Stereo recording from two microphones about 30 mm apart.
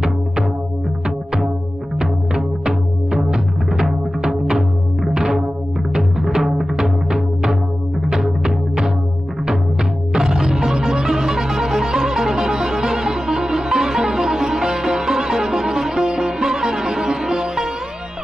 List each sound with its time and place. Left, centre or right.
1.0 s music: centre
10.1 s music: centre